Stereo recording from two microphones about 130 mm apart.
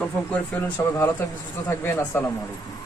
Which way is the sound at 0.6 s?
15° left (ahead or behind).